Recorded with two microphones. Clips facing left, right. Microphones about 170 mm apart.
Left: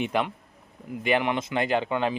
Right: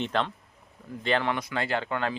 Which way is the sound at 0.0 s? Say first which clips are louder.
Left 2 dB; 10° left (ahead or behind).